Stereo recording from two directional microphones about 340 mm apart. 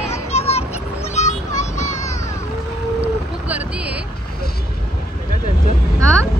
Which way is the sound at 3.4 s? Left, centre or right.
Centre.